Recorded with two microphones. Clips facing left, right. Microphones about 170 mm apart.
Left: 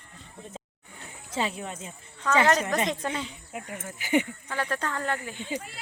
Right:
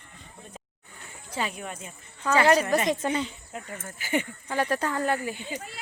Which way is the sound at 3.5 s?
15° left (ahead or behind).